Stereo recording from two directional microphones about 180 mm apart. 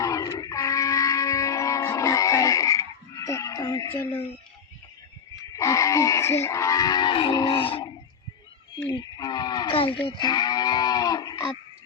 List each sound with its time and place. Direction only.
0.0 s music: 20° left (ahead or behind)
5.5 s cattle: 15° left (ahead or behind)
8.9 s cattle: 20° left (ahead or behind)
10.1 s moo: 25° left (ahead or behind)